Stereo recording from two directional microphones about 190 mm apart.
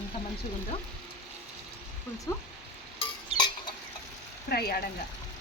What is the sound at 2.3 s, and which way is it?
Speech, 15° left (ahead or behind).